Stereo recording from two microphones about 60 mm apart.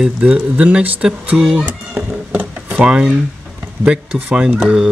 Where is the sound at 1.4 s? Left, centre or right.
Centre.